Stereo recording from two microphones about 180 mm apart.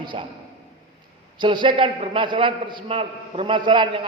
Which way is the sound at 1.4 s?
25° right (ahead or behind).